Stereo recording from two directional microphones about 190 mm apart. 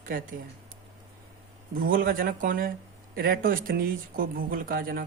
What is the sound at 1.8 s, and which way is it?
Speech, 45° right (ahead or behind).